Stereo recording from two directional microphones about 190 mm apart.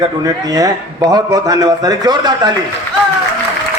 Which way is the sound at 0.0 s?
20° right (ahead or behind).